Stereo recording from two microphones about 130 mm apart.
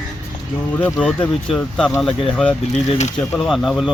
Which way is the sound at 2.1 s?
45° left (ahead or behind).